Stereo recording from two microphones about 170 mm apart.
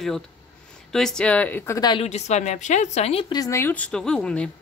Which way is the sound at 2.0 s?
40° left (ahead or behind).